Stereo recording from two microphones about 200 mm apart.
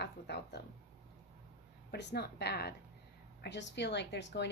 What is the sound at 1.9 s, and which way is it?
A woman's voice, 55° left (ahead or behind).